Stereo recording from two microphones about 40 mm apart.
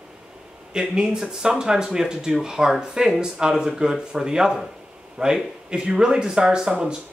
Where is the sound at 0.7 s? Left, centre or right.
Right.